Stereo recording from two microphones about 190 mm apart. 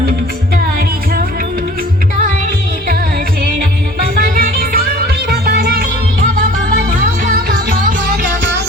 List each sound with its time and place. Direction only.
4.0 s music: 50° right (ahead or behind)
7.0 s music: 45° right (ahead or behind)